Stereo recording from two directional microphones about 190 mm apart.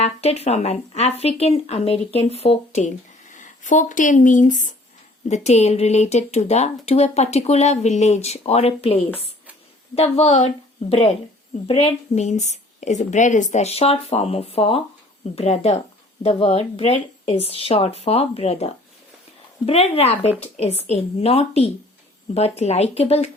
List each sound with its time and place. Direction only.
0.0 s speech: 35° left (ahead or behind)